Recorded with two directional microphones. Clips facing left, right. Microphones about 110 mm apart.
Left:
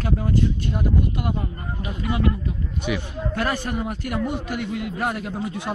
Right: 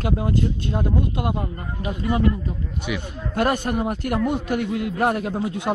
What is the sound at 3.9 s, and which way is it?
Speech, 50° right (ahead or behind).